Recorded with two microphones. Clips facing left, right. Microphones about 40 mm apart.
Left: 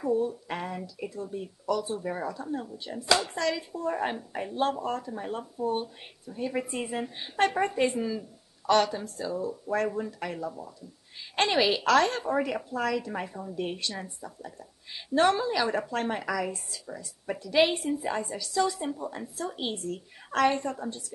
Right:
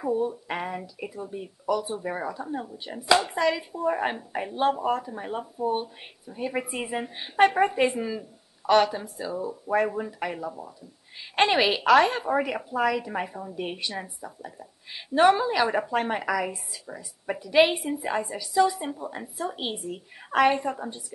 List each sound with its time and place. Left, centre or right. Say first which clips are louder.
0.0 s a woman's voice: right 1 dB; centre